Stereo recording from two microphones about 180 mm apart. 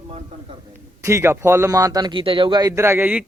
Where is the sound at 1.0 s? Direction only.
15° right (ahead or behind).